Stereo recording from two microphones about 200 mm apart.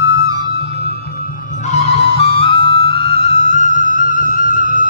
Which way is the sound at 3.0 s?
50° right (ahead or behind).